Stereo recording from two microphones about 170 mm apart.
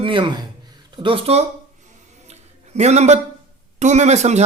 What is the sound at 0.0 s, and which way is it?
Speech, 30° right (ahead or behind).